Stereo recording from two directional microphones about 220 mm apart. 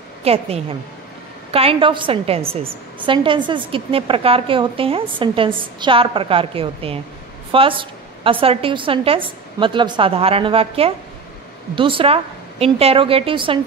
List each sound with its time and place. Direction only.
0.2 s a woman's voice: 25° right (ahead or behind)